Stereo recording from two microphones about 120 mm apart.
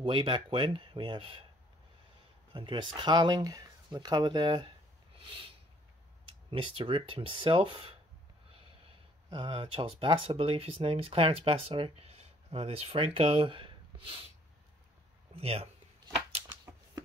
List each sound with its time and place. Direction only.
0.0 s speech: 40° right (ahead or behind)
2.5 s speech: 40° right (ahead or behind)
5.1 s a sound: 45° right (ahead or behind)
6.5 s speech: 45° right (ahead or behind)
9.3 s speech: 40° right (ahead or behind)
15.3 s speech: 55° right (ahead or behind)
16.4 s a sound: 35° right (ahead or behind)